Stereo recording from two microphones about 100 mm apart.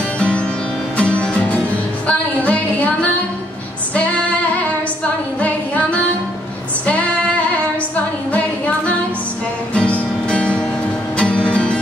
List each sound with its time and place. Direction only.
0.9 s music: 10° left (ahead or behind)
5.4 s singing: 15° left (ahead or behind)
8.3 s music: 15° left (ahead or behind)